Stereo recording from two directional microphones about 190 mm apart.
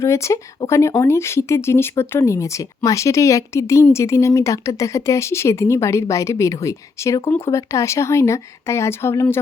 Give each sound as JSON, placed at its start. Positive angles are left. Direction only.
{"t": 0.0, "sound": "speech", "side_deg": 15}